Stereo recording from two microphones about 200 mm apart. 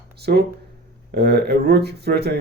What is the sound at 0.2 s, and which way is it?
Speech, 55° right (ahead or behind).